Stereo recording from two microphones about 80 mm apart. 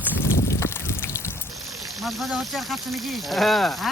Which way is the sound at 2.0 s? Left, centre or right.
Centre.